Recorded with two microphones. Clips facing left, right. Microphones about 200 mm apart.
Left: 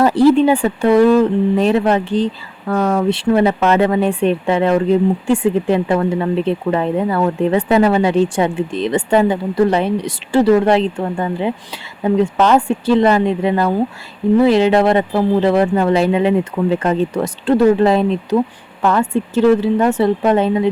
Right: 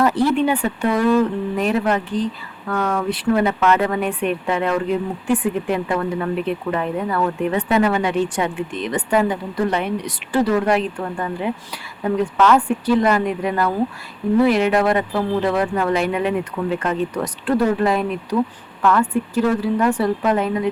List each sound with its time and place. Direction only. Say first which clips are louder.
0.0 s speech: left 6 dB; 30° left (ahead or behind)